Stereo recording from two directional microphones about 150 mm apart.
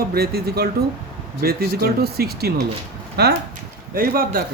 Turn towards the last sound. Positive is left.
turn(degrees=-75)  # may be behind; listen again after turning